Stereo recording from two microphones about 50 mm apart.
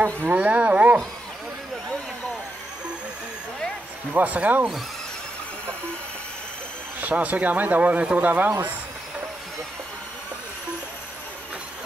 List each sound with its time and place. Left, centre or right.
0.3 s a sound: right
4.1 s speech: right
7.0 s speech: right